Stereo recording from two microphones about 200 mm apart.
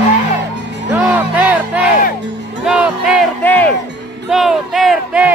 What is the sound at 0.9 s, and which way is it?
Music, 10° right (ahead or behind).